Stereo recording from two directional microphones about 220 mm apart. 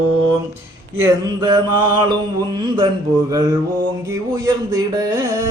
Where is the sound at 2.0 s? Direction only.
20° right (ahead or behind).